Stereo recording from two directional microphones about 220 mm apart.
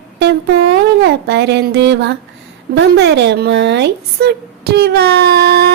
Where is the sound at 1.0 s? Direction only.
50° right (ahead or behind).